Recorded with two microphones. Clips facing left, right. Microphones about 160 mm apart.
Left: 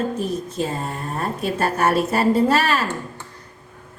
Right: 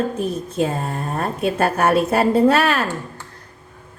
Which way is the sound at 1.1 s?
60° right (ahead or behind).